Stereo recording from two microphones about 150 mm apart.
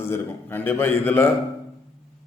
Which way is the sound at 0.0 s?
15° left (ahead or behind).